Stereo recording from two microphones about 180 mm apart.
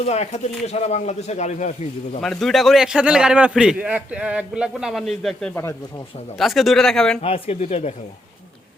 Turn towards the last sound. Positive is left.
turn(degrees=35)  # may be behind; listen again after turning